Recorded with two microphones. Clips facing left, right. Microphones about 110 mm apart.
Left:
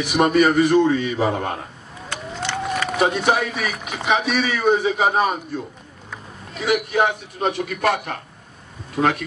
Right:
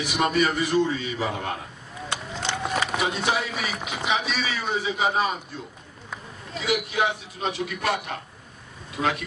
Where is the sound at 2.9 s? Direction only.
50° left (ahead or behind).